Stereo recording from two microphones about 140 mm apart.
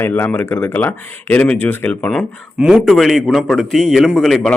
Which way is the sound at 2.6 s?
5° right (ahead or behind).